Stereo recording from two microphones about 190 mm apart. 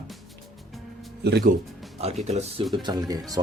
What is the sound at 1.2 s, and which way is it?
Speech, 55° right (ahead or behind).